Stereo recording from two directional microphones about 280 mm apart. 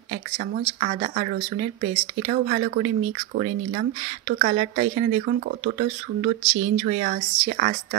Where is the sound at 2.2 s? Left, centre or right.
Right.